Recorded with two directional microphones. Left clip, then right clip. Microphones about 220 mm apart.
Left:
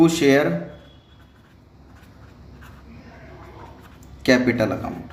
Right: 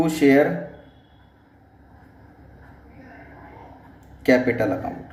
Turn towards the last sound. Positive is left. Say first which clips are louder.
# even
turn(degrees=45)  # may be behind; listen again after turning